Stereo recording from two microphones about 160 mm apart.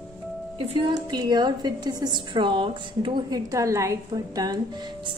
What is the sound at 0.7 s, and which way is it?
A woman's voice, 25° right (ahead or behind).